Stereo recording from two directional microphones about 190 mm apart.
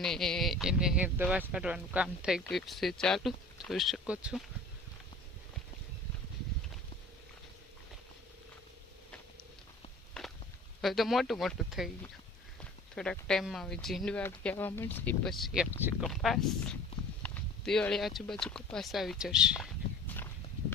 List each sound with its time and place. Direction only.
0.0 s speech: centre (ahead or behind)
10.2 s walk: 5° left (ahead or behind)
10.8 s speech: centre (ahead or behind)
13.0 s speech: 5° left (ahead or behind)